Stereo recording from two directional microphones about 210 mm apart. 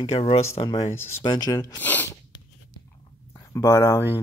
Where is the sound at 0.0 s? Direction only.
30° left (ahead or behind).